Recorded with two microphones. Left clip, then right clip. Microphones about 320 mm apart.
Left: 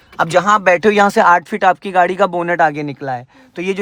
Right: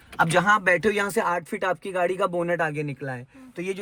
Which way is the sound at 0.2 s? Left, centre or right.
Centre.